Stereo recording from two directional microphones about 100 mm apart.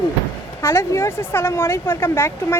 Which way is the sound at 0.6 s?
25° left (ahead or behind).